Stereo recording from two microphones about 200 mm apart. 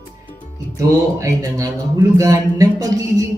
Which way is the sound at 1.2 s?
15° right (ahead or behind).